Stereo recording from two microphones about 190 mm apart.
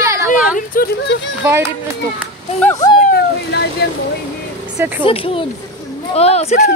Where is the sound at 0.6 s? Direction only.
50° left (ahead or behind).